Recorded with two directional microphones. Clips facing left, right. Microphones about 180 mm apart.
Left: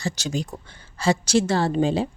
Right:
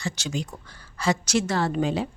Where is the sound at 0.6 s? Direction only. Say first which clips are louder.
Left 3 dB; 25° left (ahead or behind).